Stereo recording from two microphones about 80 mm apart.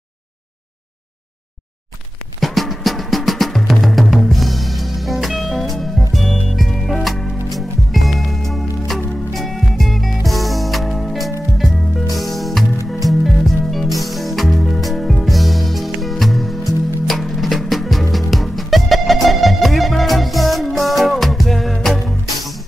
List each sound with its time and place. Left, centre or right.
2.4 s music: centre